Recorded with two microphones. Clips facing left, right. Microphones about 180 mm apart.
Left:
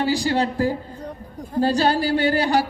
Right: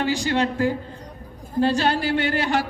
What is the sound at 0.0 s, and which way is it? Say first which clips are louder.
A man's voice: left 1 dB; 35° left (ahead or behind).